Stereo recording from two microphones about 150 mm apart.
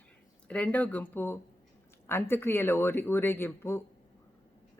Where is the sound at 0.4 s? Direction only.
10° left (ahead or behind).